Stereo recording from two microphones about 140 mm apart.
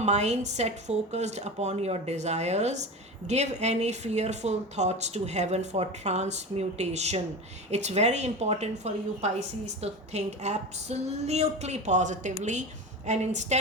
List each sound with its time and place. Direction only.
0.0 s a woman's voice: 55° right (ahead or behind)